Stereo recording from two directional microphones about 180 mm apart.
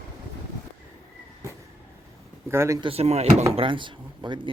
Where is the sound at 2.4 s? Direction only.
15° right (ahead or behind).